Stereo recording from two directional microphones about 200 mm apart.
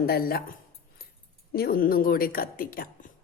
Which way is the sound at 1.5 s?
50° left (ahead or behind).